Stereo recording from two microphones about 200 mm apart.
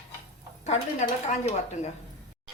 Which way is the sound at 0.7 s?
35° left (ahead or behind).